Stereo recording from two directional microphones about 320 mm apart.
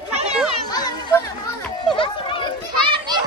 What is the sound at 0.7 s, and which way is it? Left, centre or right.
Chatter, centre.